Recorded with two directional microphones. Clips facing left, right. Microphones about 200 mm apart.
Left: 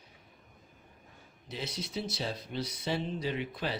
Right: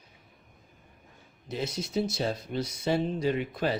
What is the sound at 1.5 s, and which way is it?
Speech, 45° right (ahead or behind).